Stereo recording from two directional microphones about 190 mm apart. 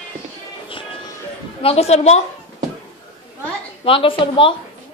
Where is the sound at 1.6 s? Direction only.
35° left (ahead or behind).